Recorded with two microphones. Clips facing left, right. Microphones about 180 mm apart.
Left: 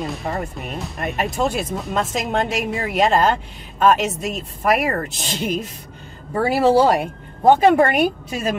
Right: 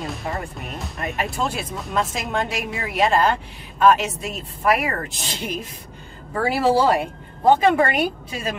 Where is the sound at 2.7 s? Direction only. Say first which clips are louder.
Left 2 dB; 45° left (ahead or behind).